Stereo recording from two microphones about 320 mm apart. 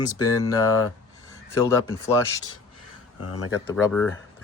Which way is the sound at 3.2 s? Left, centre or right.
Left.